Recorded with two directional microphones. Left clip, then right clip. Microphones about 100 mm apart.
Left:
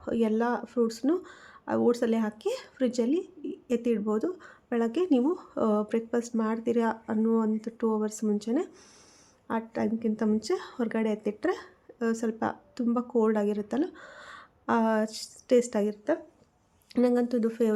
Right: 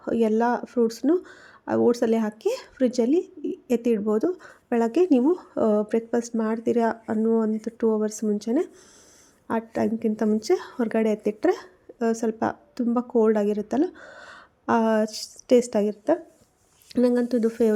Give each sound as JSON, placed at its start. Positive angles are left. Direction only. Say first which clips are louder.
{"t": 0.0, "sound": "speech", "louder": "right 5 dB", "side_deg": -35}